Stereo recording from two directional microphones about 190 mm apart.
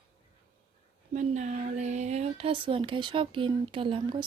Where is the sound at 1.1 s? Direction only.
40° right (ahead or behind).